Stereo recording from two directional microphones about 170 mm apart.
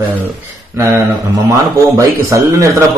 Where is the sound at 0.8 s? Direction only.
15° right (ahead or behind).